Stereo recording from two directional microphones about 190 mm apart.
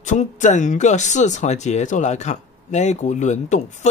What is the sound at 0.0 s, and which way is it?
Speech, 40° left (ahead or behind).